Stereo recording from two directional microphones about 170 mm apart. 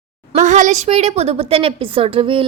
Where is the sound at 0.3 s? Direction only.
45° right (ahead or behind).